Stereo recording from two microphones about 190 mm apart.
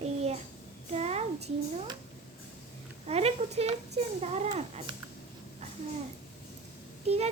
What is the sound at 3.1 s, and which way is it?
A child's voice, 35° right (ahead or behind).